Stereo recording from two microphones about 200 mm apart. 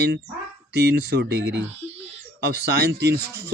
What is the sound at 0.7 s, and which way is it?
Speech, 60° right (ahead or behind).